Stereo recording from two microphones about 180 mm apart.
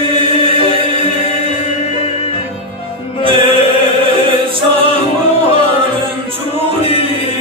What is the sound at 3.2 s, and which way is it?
Music, 30° right (ahead or behind).